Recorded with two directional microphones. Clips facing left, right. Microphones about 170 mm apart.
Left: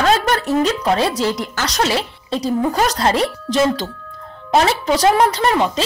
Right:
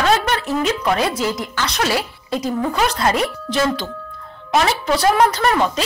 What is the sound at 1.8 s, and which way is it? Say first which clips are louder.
Speech: left 1 dB; 25° left (ahead or behind).